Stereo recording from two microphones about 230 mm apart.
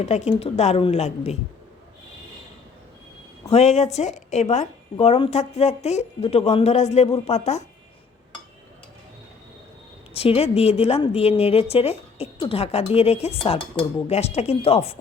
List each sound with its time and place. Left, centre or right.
0.0 s a woman's voice: left
3.5 s a woman's voice: left
10.2 s a woman's voice: left